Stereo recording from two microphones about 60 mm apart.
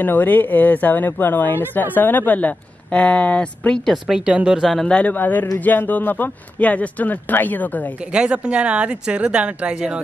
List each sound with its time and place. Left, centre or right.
0.0 s speech: left
4.1 s speech: centre
4.8 s speech: left
5.1 s speech: left
8.1 s speech: centre